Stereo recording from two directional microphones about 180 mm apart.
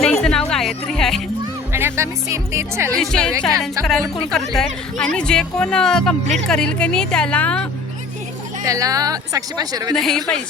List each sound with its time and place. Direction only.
0.0 s music: 5° left (ahead or behind)
1.7 s speech: 15° right (ahead or behind)
3.0 s speech: 5° left (ahead or behind)
8.6 s speech: 20° right (ahead or behind)
9.9 s speech: centre (ahead or behind)